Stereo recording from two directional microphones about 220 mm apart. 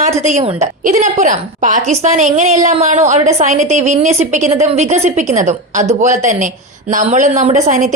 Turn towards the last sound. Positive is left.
turn(degrees=-35)  # may be behind; listen again after turning